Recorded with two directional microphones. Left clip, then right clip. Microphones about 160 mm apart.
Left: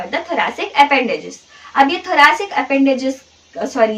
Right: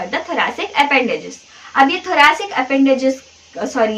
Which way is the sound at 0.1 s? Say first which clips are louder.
Left 1 dB; 15° right (ahead or behind).